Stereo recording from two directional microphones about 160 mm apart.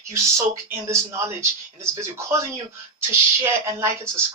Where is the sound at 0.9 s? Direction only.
15° right (ahead or behind).